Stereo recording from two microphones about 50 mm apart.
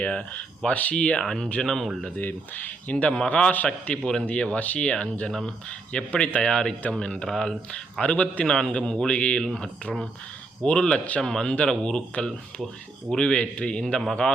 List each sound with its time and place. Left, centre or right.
0.0 s speech: left
0.7 s speech: left
0.9 s speech: centre
2.1 s speech: left
5.3 s speech: centre
5.6 s speech: left
8.0 s speech: left